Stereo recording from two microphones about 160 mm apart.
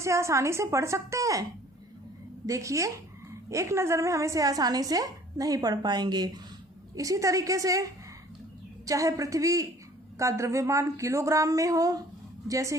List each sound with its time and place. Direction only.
0.0 s a woman's voice: 20° right (ahead or behind)
2.5 s a woman's voice: 20° right (ahead or behind)
8.9 s a woman's voice: 20° right (ahead or behind)